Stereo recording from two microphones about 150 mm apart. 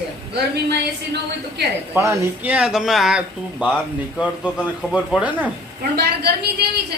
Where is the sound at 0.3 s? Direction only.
90° right.